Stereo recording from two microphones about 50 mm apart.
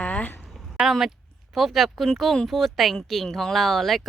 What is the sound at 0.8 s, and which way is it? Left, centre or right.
Speech, right.